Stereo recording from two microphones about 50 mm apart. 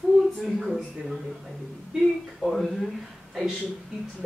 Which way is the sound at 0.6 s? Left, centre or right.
Centre.